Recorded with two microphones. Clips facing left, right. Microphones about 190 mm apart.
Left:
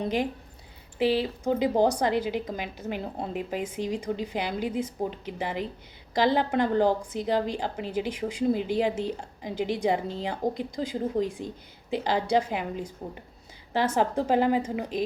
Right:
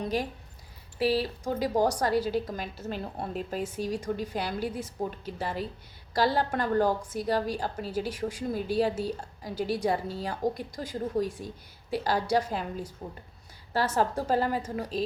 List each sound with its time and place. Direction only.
0.0 s a woman's voice: 20° left (ahead or behind)